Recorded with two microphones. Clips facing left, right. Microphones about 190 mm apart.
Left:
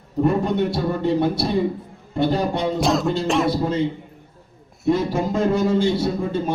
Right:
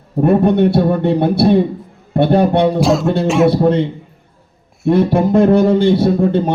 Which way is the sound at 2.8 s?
Centre (ahead or behind).